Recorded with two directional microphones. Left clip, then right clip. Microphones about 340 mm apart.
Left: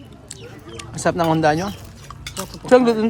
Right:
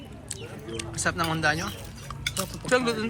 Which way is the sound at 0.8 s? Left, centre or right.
Left.